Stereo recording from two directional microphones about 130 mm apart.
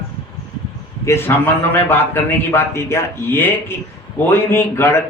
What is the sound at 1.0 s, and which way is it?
A man's voice, 20° left (ahead or behind).